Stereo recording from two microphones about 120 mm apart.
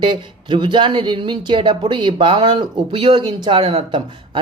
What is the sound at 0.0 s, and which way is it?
Speech, 40° right (ahead or behind).